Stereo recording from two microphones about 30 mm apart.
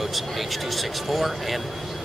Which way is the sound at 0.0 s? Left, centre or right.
Centre.